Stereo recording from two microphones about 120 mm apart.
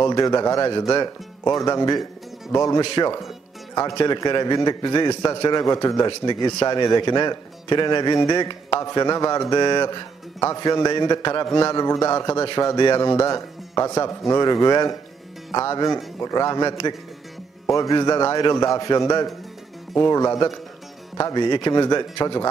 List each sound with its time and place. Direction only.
0.0 s speech: 30° left (ahead or behind)
2.8 s speech: 40° left (ahead or behind)